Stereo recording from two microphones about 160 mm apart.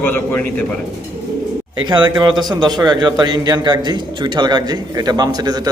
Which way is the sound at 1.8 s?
30° right (ahead or behind).